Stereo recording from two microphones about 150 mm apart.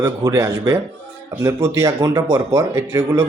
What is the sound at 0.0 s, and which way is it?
Speech, 20° right (ahead or behind).